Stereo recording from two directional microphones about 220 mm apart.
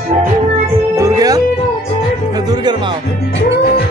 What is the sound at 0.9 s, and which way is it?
Music, 15° right (ahead or behind).